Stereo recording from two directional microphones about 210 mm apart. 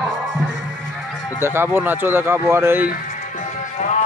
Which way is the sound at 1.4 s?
10° right (ahead or behind).